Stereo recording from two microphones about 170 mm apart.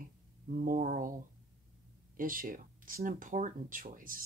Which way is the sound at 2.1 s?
55° right (ahead or behind).